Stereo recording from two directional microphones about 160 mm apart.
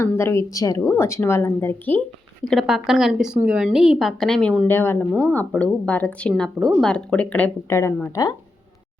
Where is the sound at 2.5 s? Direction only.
Centre (ahead or behind).